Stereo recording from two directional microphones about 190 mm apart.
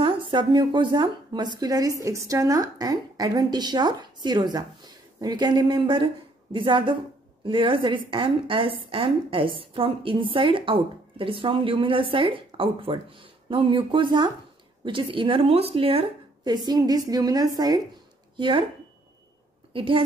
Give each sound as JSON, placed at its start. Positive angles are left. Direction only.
{"t": 0.0, "sound": "a woman's voice", "side_deg": -25}
{"t": 19.7, "sound": "a woman's voice", "side_deg": -25}